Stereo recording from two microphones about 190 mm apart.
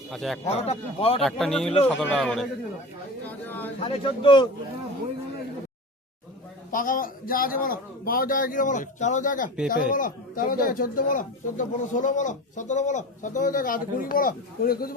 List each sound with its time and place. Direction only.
0.1 s speech: centre (ahead or behind)
0.4 s speech: 35° left (ahead or behind)
1.2 s a man's voice: centre (ahead or behind)
3.8 s a man's voice: 30° left (ahead or behind)
6.7 s a man's voice: 45° left (ahead or behind)